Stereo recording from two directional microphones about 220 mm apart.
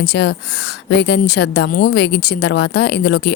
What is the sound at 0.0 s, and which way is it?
A woman's voice, 45° left (ahead or behind).